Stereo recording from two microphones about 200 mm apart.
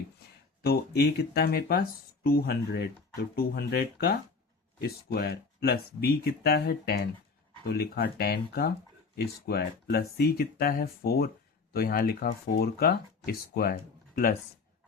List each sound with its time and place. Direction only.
0.6 s speech: 55° left (ahead or behind)